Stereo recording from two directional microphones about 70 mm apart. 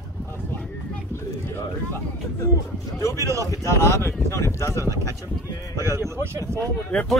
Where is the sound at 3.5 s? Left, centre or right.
Left.